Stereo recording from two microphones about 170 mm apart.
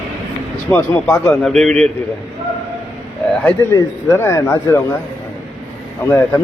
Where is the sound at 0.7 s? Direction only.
15° left (ahead or behind).